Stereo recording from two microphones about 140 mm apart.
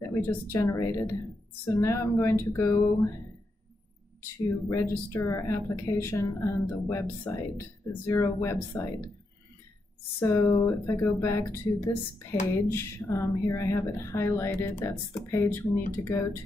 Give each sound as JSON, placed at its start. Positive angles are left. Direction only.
{"t": 0.0, "sound": "speech", "side_deg": 15}
{"t": 4.6, "sound": "speech", "side_deg": 20}
{"t": 10.2, "sound": "speech", "side_deg": 20}